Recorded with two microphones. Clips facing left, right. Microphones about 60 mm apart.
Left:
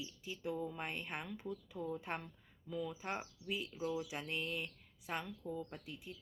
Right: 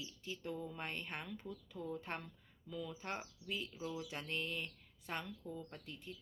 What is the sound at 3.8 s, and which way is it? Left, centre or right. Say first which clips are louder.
Speech: left 8 dB; left.